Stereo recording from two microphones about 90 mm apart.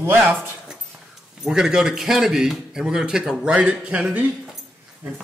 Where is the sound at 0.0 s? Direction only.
25° right (ahead or behind).